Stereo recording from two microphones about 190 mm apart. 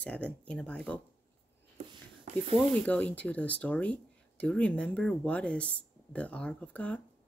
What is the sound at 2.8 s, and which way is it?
Speech, 5° left (ahead or behind).